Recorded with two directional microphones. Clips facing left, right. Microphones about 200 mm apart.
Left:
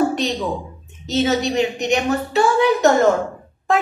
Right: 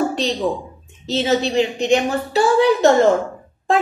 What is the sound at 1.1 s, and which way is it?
A woman's voice, 30° right (ahead or behind).